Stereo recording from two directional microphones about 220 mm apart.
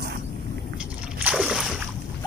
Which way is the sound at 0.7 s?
5° right (ahead or behind).